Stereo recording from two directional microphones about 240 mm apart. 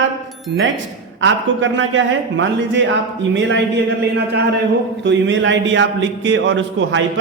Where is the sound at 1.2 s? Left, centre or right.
Right.